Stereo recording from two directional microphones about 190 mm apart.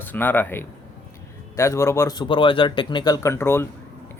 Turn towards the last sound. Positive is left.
turn(degrees=10)  # may be behind; listen again after turning